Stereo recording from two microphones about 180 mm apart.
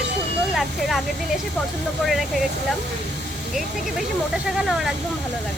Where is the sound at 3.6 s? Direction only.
Centre (ahead or behind).